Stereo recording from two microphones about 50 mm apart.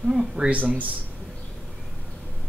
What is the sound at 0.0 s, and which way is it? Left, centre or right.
Speech, centre.